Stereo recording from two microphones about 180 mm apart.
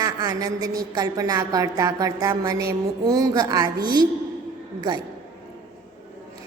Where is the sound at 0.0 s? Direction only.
20° right (ahead or behind).